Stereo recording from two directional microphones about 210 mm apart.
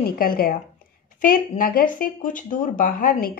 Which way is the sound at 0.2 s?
45° left (ahead or behind).